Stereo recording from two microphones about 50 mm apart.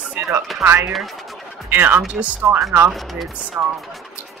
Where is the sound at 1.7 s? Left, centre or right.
Right.